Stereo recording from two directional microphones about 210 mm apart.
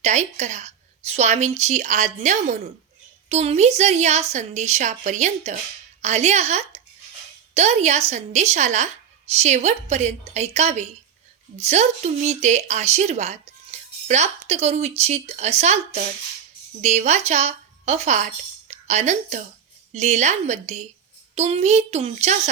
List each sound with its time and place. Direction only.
0.0 s speech: 35° right (ahead or behind)
16.8 s speech: 35° right (ahead or behind)